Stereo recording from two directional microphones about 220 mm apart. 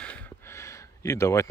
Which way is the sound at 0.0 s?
5° left (ahead or behind).